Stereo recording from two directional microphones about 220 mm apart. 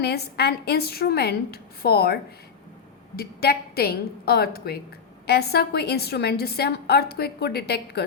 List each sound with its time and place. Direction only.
0.0 s a woman's voice: 45° left (ahead or behind)
3.2 s a woman's voice: 45° left (ahead or behind)